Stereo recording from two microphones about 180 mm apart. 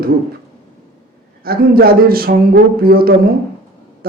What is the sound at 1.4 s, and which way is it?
Speech, 55° right (ahead or behind).